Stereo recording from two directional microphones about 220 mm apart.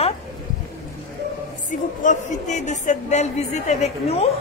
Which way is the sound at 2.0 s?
35° left (ahead or behind).